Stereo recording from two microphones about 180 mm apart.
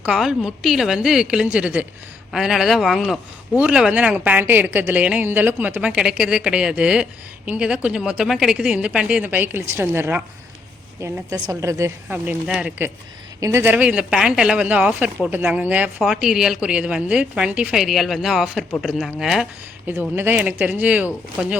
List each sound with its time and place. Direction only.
0.0 s speech: 5° right (ahead or behind)